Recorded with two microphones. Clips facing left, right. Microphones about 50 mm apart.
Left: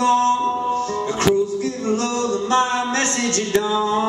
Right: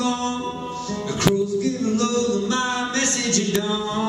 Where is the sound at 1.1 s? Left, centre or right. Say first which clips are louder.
Left 1 dB; left.